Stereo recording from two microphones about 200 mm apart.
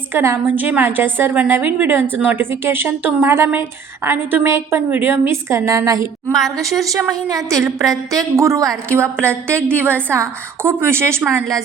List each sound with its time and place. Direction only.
0.1 s a woman's voice: 10° right (ahead or behind)